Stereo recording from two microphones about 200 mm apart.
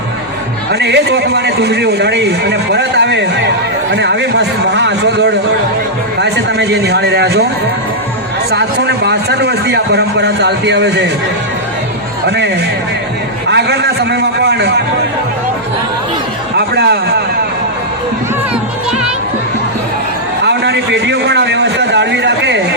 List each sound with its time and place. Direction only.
0.7 s a man's voice: 55° right (ahead or behind)
8.4 s a man's voice: 55° right (ahead or behind)
13.5 s a man's voice: 55° right (ahead or behind)
16.6 s speech: 55° right (ahead or behind)
20.4 s a sound: 55° right (ahead or behind)